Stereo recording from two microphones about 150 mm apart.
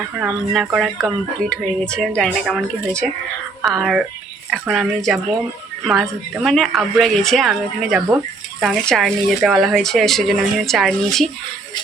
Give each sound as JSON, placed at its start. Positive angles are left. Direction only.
{"t": 0.2, "sound": "speech", "side_deg": -5}